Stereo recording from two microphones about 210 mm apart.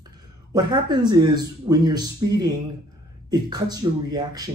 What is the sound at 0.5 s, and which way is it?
A man's voice, 20° right (ahead or behind).